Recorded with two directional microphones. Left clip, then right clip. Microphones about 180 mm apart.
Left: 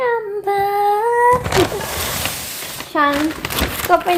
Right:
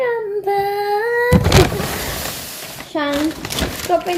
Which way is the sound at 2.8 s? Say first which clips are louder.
Left 4 dB; 15° left (ahead or behind).